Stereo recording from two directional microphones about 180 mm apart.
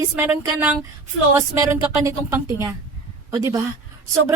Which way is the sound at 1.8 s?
20° right (ahead or behind).